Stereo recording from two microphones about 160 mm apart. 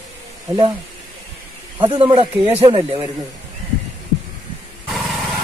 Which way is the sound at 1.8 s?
30° right (ahead or behind).